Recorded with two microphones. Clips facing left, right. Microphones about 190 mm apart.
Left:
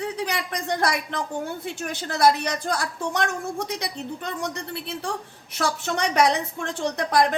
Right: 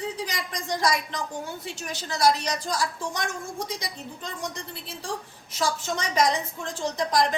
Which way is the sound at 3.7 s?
65° left (ahead or behind).